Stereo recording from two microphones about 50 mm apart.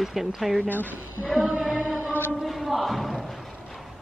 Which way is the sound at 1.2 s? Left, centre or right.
Centre.